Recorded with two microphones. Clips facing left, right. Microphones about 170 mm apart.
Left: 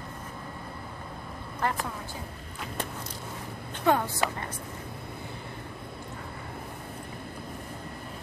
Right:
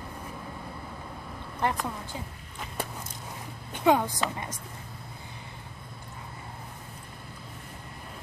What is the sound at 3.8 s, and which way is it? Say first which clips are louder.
Speech: right 2 dB; 15° right (ahead or behind).